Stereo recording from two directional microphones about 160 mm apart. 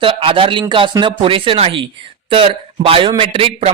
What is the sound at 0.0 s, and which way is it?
Speech, 35° right (ahead or behind).